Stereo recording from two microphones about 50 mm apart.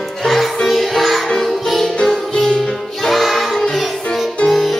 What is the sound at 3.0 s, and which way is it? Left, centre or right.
Music, centre.